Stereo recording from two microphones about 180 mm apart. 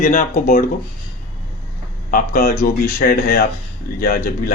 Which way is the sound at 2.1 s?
50° left (ahead or behind).